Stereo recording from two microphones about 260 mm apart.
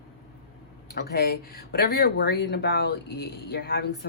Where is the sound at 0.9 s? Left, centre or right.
Left.